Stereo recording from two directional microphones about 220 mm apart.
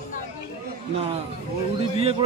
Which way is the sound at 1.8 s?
25° right (ahead or behind).